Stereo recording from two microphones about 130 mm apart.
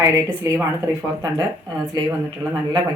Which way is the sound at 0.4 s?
20° right (ahead or behind).